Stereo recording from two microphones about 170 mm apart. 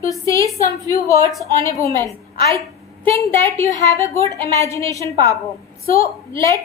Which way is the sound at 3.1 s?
15° left (ahead or behind).